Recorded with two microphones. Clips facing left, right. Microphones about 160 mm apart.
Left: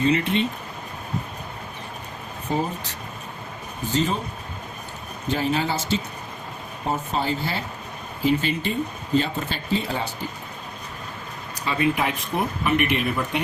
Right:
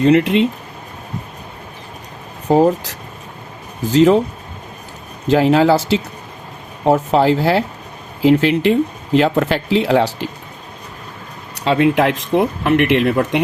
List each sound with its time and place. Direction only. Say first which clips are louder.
0.0 s speech: right 9 dB; 80° right
2.5 s speech: right 13 dB; 90° right
5.3 s speech: right 12 dB; 90° right
11.5 s speech: right 9 dB; 80° right